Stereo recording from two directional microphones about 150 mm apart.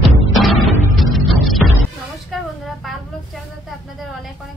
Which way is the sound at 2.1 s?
Centre (ahead or behind).